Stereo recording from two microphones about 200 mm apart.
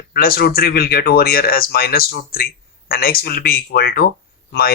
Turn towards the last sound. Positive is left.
turn(degrees=50)  # may be behind; listen again after turning